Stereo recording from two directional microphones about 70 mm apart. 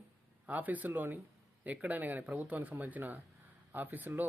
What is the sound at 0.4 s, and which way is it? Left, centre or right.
Speech, right.